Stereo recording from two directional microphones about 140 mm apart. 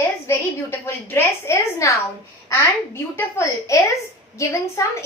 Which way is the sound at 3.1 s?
20° left (ahead or behind).